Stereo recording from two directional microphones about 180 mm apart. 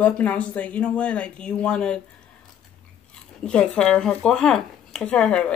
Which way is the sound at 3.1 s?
5° left (ahead or behind).